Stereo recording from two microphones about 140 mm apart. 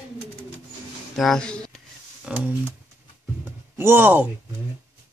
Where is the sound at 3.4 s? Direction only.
15° right (ahead or behind).